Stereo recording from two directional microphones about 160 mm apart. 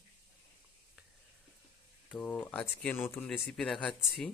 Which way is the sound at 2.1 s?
10° left (ahead or behind).